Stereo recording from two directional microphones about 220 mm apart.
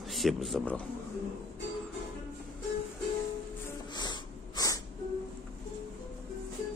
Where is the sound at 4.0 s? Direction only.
20° left (ahead or behind).